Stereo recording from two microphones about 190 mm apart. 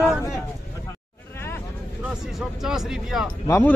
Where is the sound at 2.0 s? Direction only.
Centre (ahead or behind).